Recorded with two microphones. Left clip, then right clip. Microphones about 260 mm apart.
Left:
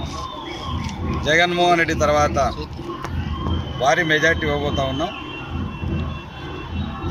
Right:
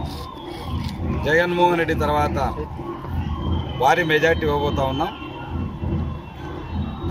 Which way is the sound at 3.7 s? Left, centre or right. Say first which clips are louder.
Even; centre.